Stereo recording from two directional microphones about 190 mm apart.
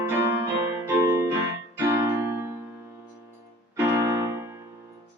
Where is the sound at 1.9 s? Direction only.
15° right (ahead or behind).